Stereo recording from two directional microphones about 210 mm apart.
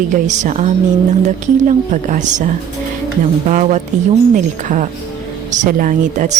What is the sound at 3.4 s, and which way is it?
Speech, 35° right (ahead or behind).